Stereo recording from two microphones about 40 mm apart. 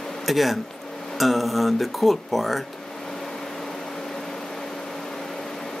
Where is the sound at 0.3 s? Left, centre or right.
Centre.